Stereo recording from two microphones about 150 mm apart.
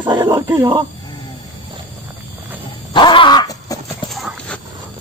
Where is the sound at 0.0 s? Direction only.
30° right (ahead or behind).